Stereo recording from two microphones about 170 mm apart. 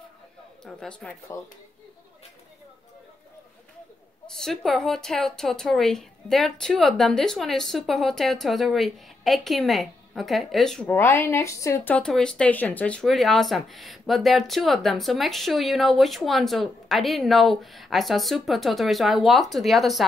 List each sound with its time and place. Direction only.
0.7 s a woman's voice: 5° left (ahead or behind)
1.3 s speech: 15° left (ahead or behind)
4.3 s a woman's voice: 5° left (ahead or behind)